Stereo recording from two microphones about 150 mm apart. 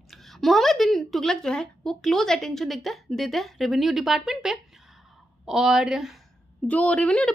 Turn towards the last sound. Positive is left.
turn(degrees=10)  # may be behind; listen again after turning